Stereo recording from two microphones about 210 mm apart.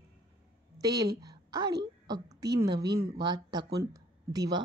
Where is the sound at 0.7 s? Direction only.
20° right (ahead or behind).